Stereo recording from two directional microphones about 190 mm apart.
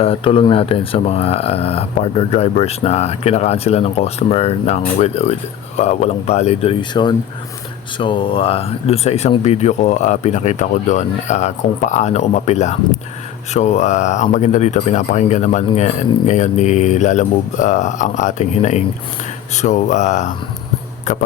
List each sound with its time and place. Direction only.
0.0 s speech: 30° left (ahead or behind)